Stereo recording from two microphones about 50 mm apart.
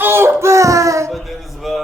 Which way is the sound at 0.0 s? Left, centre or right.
Right.